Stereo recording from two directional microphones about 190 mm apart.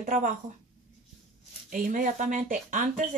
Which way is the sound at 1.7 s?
45° right (ahead or behind).